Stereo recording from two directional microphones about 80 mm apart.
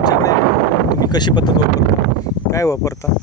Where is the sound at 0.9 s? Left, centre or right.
Left.